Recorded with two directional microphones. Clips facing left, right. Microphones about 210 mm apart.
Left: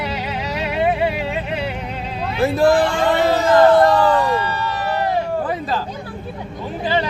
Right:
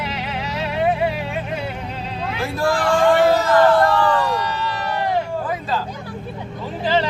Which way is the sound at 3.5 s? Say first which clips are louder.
Left 3 dB; 20° left (ahead or behind).